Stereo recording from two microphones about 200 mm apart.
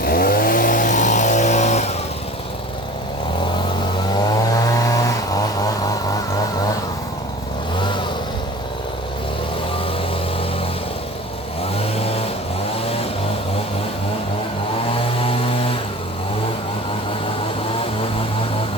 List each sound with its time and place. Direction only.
0.0 s vehicle: 50° left (ahead or behind)
4.5 s vehicle: 15° left (ahead or behind)
7.8 s vehicle: 25° left (ahead or behind)
11.8 s vehicle: 30° left (ahead or behind)
15.2 s vehicle: 25° left (ahead or behind)